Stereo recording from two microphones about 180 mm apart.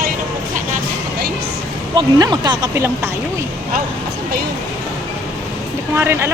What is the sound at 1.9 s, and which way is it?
Speech, 25° right (ahead or behind).